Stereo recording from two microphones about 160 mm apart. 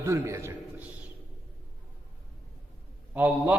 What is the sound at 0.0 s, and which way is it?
Speech, 20° right (ahead or behind).